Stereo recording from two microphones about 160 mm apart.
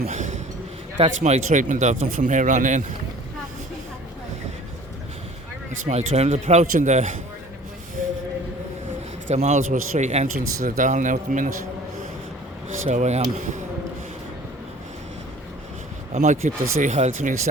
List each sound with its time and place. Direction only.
0.1 s a sound: 50° right (ahead or behind)
1.2 s speech: 50° right (ahead or behind)
5.8 s speech: 45° right (ahead or behind)
9.3 s speech: 45° right (ahead or behind)
12.6 s speech: 45° right (ahead or behind)
16.1 s speech: 50° right (ahead or behind)